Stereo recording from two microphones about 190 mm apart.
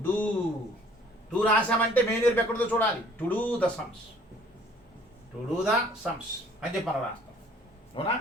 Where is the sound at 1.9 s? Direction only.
10° left (ahead or behind).